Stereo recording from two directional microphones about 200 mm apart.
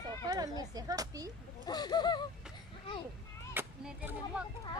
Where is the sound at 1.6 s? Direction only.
20° left (ahead or behind).